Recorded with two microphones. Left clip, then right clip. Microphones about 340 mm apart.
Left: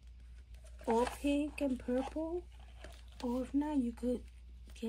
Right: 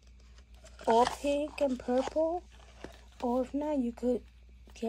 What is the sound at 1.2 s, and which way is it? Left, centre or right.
Speech, centre.